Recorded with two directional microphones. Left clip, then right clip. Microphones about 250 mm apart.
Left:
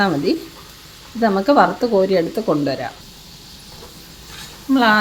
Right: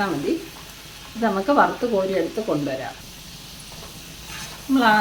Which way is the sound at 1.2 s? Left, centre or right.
Left.